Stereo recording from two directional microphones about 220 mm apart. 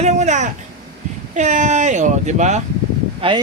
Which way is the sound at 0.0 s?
30° right (ahead or behind).